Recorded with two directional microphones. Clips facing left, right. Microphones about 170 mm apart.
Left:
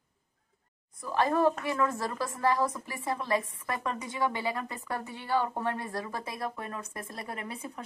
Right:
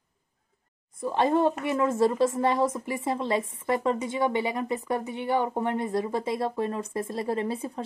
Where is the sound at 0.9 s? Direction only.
25° right (ahead or behind).